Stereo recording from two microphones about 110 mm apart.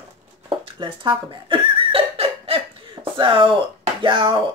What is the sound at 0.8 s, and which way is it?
Giggle, 45° right (ahead or behind).